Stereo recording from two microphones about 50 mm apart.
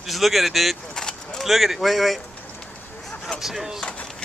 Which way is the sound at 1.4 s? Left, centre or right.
Centre.